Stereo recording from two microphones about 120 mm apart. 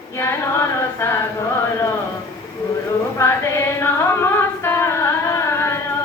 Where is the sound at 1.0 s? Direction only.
20° left (ahead or behind).